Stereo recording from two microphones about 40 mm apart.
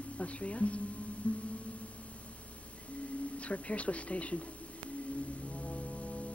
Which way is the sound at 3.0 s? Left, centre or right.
Left.